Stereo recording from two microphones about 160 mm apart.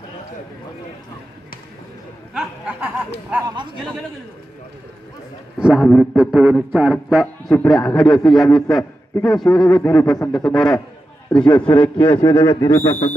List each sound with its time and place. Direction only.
2.3 s a sound: 5° right (ahead or behind)
5.6 s a man's voice: 5° right (ahead or behind)
11.5 s a man's voice: 30° left (ahead or behind)